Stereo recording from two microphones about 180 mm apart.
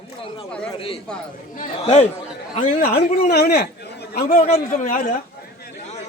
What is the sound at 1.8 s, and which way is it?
Speech, 35° left (ahead or behind).